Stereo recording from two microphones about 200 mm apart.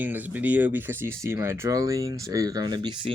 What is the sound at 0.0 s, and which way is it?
Speech, 10° right (ahead or behind).